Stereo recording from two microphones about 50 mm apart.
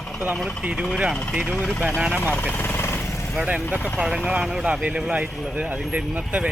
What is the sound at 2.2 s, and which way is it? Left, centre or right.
Speech, left.